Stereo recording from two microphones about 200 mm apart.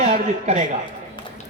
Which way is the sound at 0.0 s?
35° right (ahead or behind).